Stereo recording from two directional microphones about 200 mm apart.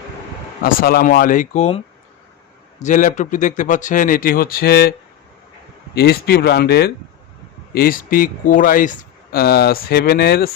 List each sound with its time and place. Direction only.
0.6 s speech: 45° left (ahead or behind); by 1.8 s 30° left (ahead or behind)
2.8 s speech: 40° left (ahead or behind)